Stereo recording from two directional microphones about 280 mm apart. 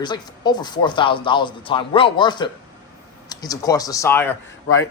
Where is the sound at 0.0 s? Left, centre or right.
Centre.